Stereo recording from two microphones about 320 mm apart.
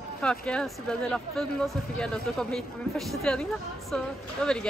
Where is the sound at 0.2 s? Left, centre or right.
Centre.